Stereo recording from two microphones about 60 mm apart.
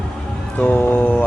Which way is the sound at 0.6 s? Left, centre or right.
Left.